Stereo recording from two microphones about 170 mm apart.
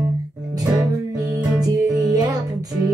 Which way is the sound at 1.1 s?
20° right (ahead or behind).